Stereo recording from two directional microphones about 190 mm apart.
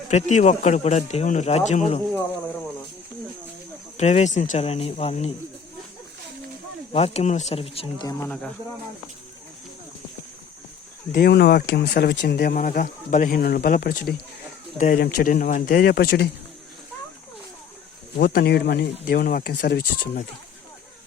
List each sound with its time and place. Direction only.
0.1 s speech: 40° left (ahead or behind)
3.9 s speech: 35° left (ahead or behind)
6.9 s speech: 35° left (ahead or behind)
8.3 s speech: 5° left (ahead or behind)
11.1 s speech: 60° left (ahead or behind)
18.2 s speech: 60° left (ahead or behind)